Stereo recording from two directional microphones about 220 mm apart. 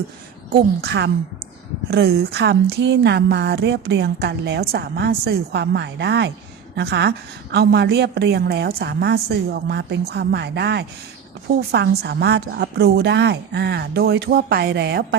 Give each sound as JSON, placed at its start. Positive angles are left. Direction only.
{"t": 0.5, "sound": "speech", "side_deg": -50}